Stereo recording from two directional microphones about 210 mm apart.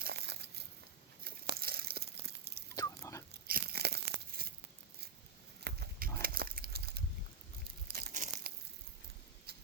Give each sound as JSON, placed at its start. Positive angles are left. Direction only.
{"t": 0.0, "sound": "crumpling", "side_deg": -50}
{"t": 1.2, "sound": "tearing", "side_deg": -50}
{"t": 2.7, "sound": "biting", "side_deg": 15}
{"t": 3.4, "sound": "tearing", "side_deg": -45}
{"t": 5.6, "sound": "a sound", "side_deg": -50}
{"t": 7.9, "sound": "crumpling", "side_deg": -40}
{"t": 9.5, "sound": "a sound", "side_deg": -50}